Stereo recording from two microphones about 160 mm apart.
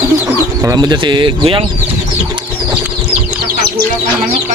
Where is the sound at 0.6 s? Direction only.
20° right (ahead or behind).